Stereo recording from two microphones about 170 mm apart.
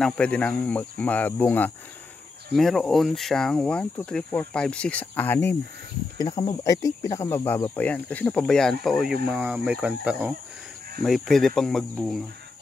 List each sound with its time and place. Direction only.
0.0 s speech: 5° left (ahead or behind)
6.1 s speech: 30° left (ahead or behind); by 12.2 s centre (ahead or behind)